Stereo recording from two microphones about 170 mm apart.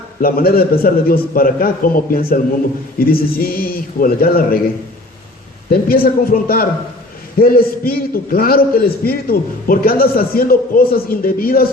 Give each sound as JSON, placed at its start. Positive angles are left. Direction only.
{"t": 0.2, "sound": "a man's voice", "side_deg": 60}
{"t": 5.7, "sound": "a man's voice", "side_deg": 60}